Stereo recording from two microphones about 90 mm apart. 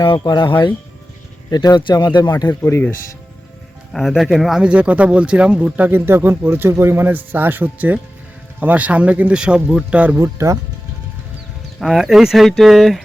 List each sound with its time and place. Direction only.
1.5 s speech: 50° left (ahead or behind)
2.5 s speech: 30° left (ahead or behind)
3.9 s speech: 5° right (ahead or behind)
4.6 s a man's voice: 15° right (ahead or behind)
10.2 s speech: 35° right (ahead or behind)
11.8 s speech: centre (ahead or behind)